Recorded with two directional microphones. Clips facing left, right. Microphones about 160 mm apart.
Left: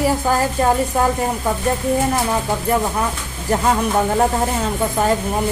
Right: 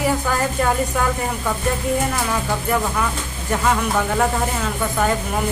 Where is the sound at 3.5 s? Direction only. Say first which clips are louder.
Left 2 dB; 35° left (ahead or behind).